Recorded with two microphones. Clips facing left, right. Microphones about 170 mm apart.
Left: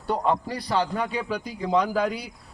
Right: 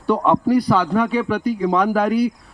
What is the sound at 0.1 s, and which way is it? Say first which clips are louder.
A man's voice: right 9 dB; 85° right.